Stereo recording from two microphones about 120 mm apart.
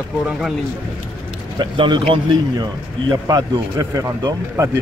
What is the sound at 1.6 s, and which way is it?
Speech, 45° right (ahead or behind).